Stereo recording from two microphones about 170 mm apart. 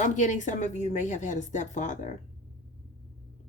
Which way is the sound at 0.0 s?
45° left (ahead or behind).